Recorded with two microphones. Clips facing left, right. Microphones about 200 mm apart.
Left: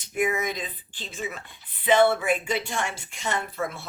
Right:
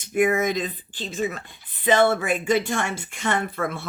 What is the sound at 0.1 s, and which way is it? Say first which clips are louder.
Speech: right 6 dB; 50° right (ahead or behind).